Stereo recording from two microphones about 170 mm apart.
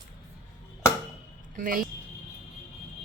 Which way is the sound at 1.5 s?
55° right (ahead or behind).